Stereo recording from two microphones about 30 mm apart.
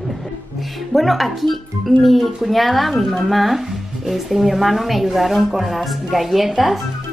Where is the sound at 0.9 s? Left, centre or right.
Centre.